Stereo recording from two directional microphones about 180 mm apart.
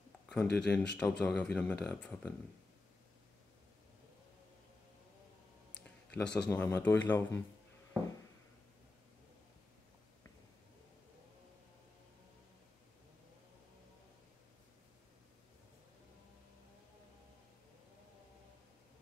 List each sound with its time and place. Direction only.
0.3 s speech: 5° left (ahead or behind)
5.8 s a sound: 5° left (ahead or behind)
6.5 s speech: 10° left (ahead or behind)